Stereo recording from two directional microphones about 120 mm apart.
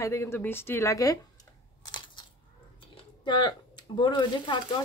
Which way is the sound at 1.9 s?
40° left (ahead or behind).